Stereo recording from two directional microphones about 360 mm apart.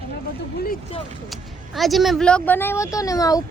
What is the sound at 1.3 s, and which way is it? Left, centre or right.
Speech, centre.